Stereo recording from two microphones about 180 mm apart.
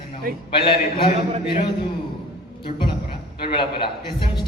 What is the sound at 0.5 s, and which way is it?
Speech, 30° left (ahead or behind).